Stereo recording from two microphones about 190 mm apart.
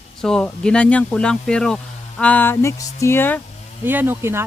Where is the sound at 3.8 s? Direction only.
10° right (ahead or behind).